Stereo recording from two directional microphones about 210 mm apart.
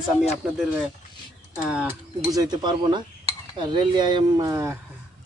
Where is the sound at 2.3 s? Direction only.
20° right (ahead or behind).